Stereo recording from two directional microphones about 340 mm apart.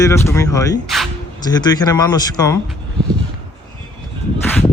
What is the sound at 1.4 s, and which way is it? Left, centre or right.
Speech, centre.